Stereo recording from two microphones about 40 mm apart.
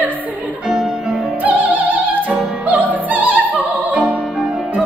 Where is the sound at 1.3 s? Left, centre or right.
Right.